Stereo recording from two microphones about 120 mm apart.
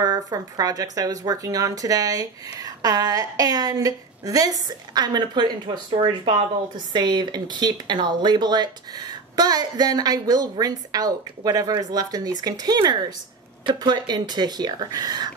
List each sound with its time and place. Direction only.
0.0 s speech: 30° right (ahead or behind)